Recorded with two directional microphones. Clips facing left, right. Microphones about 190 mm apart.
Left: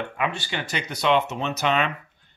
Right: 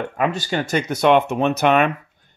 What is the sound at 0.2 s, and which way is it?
Speech, 40° right (ahead or behind).